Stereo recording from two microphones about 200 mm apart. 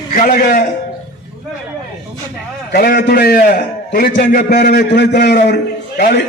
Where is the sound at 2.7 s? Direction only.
50° left (ahead or behind).